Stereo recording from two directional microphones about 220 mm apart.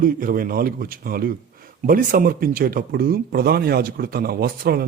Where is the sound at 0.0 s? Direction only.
40° right (ahead or behind).